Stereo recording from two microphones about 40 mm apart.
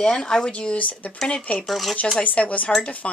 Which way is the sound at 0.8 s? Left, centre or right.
Left.